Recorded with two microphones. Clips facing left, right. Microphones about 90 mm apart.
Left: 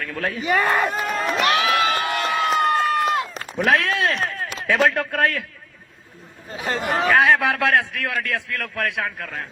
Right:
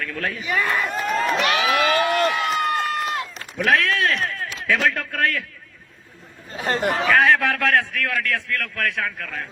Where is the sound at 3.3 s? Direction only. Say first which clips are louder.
Left 3 dB; 45° left (ahead or behind).